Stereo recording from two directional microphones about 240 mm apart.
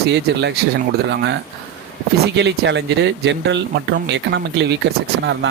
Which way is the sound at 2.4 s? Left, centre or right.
Right.